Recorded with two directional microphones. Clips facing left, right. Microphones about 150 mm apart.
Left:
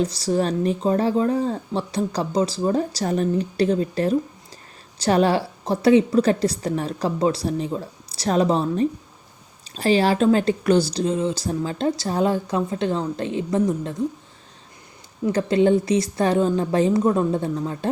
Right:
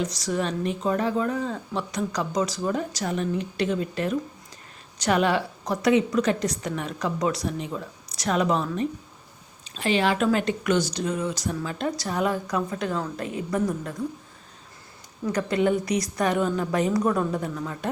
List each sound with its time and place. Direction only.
0.0 s speech: 30° left (ahead or behind)
15.3 s speech: 30° left (ahead or behind)